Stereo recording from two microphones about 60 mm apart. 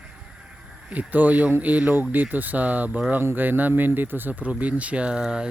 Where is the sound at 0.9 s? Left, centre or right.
Right.